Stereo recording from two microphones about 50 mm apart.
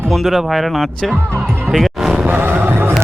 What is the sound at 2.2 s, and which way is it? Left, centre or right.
Music, right.